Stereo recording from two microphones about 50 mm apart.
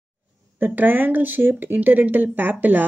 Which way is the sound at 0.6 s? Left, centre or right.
Right.